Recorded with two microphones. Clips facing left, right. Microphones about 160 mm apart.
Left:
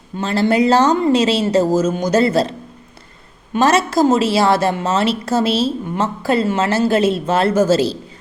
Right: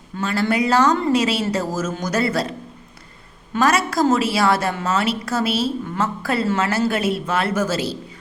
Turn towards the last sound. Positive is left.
turn(degrees=30)  # may be behind; listen again after turning